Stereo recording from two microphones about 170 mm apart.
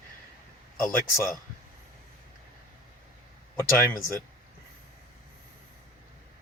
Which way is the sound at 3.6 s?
15° left (ahead or behind).